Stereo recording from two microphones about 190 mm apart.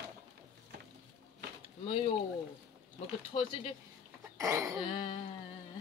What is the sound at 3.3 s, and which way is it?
Speech, 30° left (ahead or behind).